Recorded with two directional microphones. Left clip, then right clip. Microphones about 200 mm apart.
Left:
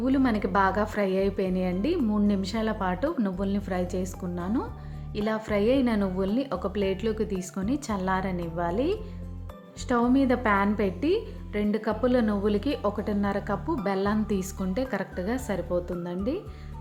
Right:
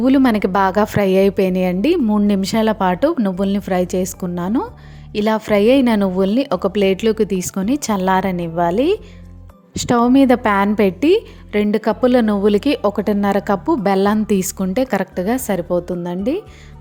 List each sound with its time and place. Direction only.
0.0 s a woman's voice: 45° right (ahead or behind)